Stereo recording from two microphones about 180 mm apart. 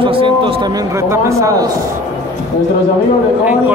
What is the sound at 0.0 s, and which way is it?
A man's voice, 30° right (ahead or behind).